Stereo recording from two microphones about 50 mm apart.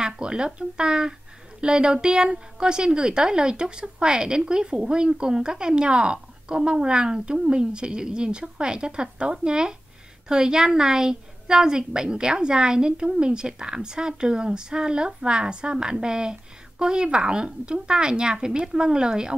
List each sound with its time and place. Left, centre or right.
0.0 s a woman's voice: centre